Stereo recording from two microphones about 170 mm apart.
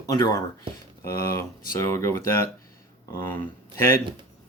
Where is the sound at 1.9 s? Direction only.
15° left (ahead or behind).